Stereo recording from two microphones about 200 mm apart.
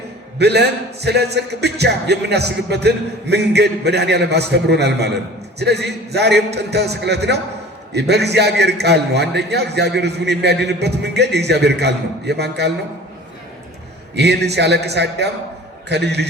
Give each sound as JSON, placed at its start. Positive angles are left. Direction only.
{"t": 0.3, "sound": "a man's voice", "side_deg": -55}
{"t": 14.2, "sound": "a man's voice", "side_deg": -55}